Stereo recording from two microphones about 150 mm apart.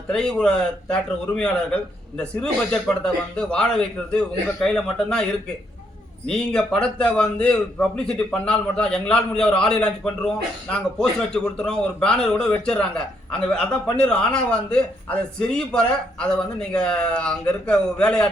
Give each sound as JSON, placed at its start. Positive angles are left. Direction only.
{"t": 0.1, "sound": "a man's voice", "side_deg": 5}
{"t": 6.2, "sound": "a man's voice", "side_deg": 5}